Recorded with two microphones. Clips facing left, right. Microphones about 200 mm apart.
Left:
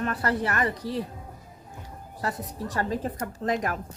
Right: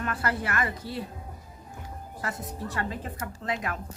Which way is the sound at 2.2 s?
35° left (ahead or behind).